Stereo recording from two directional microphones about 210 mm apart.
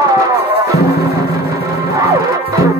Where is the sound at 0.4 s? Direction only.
50° left (ahead or behind).